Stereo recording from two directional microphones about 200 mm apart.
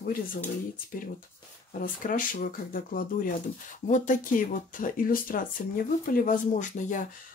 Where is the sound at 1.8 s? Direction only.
45° left (ahead or behind).